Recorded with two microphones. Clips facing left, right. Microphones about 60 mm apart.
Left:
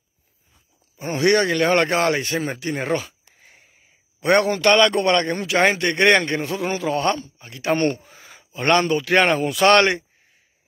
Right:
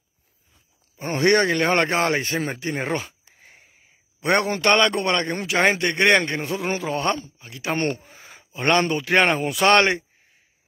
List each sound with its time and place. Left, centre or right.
0.9 s speech: right
3.3 s wheeze: centre
4.2 s speech: right
7.3 s speech: centre
7.7 s speech: right